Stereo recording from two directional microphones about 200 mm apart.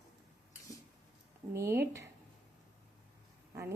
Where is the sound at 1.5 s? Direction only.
15° right (ahead or behind).